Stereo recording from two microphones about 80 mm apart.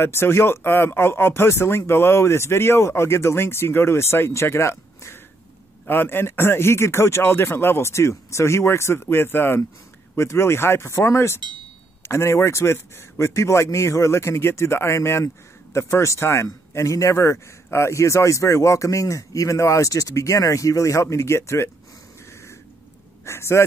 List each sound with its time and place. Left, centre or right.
0.0 s a man's voice: left
23.2 s a man's voice: left